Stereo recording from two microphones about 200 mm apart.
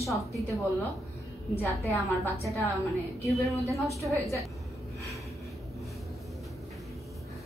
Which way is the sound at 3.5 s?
Centre (ahead or behind).